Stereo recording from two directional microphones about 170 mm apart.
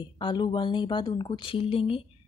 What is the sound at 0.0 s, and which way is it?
A woman's voice, 25° left (ahead or behind).